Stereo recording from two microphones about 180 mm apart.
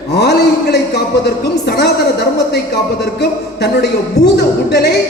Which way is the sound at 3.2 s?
65° left (ahead or behind).